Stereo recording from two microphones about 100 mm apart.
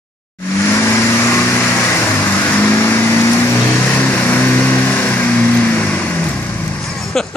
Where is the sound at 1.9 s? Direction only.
20° left (ahead or behind).